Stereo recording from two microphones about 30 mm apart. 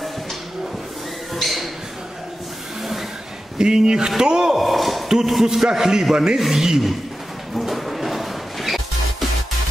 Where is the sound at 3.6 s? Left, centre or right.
Centre.